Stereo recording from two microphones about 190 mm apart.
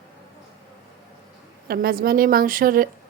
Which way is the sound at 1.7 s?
50° right (ahead or behind).